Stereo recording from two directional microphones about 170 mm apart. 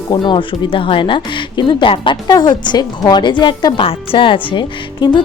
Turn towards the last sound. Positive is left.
turn(degrees=25)  # may be behind; listen again after turning